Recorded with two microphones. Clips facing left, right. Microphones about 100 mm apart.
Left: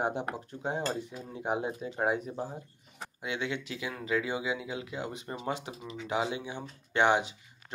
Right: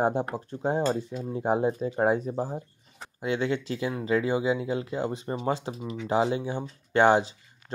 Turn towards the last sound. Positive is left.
turn(degrees=-35)  # may be behind; listen again after turning